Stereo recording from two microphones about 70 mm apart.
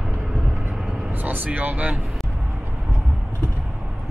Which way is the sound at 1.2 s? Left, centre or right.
Right.